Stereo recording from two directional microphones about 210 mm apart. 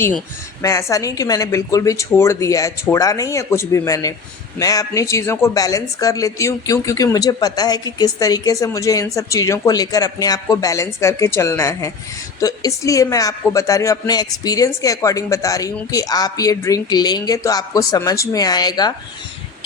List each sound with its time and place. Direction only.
0.6 s speech: 15° left (ahead or behind)